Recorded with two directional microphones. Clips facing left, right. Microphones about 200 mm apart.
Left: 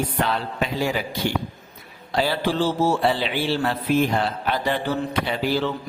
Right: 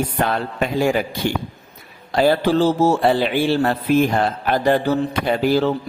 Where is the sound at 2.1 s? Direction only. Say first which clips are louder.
Right 6 dB; 45° right (ahead or behind).